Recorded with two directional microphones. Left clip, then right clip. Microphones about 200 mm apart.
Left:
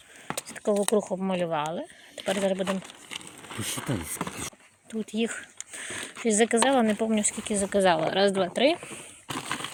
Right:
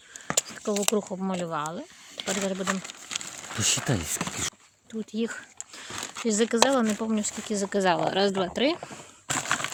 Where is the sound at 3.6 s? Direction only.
45° right (ahead or behind).